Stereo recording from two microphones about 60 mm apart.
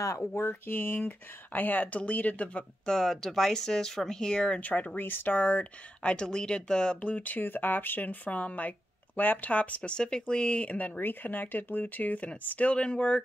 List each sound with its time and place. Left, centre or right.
0.4 s speech: left; by 4.6 s centre
4.6 s speech: left